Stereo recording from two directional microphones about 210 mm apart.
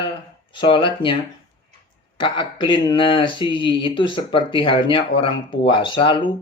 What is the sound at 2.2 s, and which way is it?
Speech, 20° left (ahead or behind).